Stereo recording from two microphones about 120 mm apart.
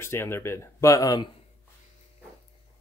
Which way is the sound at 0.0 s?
20° left (ahead or behind).